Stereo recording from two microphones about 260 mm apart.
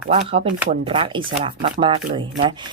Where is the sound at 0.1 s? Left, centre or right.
Right.